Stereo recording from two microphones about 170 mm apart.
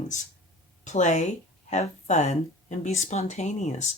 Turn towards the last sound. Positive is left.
turn(degrees=40)  # may be behind; listen again after turning